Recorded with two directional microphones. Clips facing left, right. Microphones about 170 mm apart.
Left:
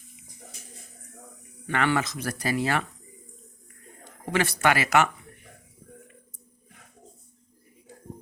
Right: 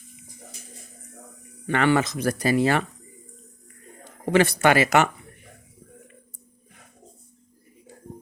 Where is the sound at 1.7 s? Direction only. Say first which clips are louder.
Right 5 dB; 25° right (ahead or behind).